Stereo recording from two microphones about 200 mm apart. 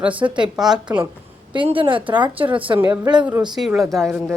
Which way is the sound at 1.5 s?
25° right (ahead or behind).